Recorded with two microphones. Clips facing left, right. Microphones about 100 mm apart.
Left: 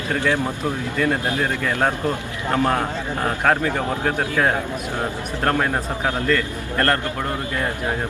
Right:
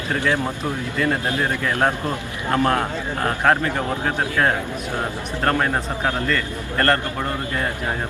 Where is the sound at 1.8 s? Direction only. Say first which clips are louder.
Even; 15° right (ahead or behind).